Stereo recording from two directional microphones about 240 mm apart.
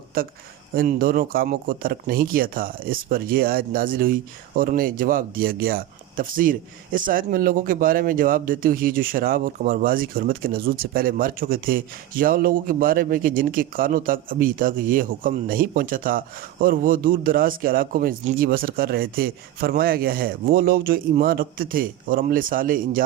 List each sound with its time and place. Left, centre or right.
0.8 s speech: right